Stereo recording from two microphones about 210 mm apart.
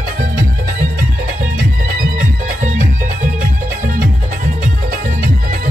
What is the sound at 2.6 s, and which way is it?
Music, 40° right (ahead or behind).